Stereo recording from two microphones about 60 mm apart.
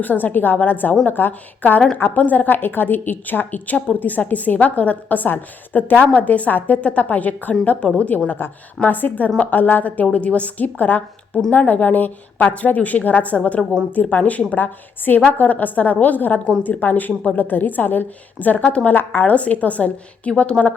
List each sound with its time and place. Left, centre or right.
0.0 s a woman's voice: left
8.4 s a woman's voice: left
18.9 s a woman's voice: left